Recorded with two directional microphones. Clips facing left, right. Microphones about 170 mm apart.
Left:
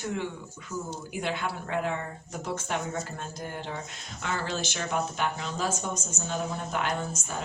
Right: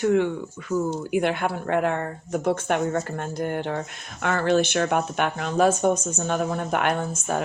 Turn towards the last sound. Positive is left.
turn(degrees=-55)  # may be behind; listen again after turning